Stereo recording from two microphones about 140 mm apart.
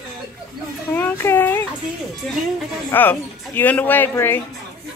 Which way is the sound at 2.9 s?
15° left (ahead or behind).